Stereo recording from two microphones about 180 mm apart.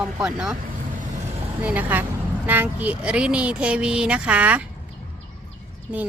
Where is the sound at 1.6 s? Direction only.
10° right (ahead or behind).